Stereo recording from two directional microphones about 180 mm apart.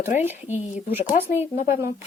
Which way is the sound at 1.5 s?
40° left (ahead or behind).